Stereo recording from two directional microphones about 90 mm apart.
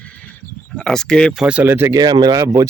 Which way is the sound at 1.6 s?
25° right (ahead or behind).